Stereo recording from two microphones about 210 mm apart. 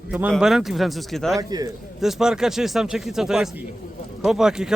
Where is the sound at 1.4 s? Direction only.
15° right (ahead or behind).